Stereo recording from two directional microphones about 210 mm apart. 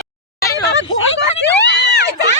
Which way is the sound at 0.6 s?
55° left (ahead or behind).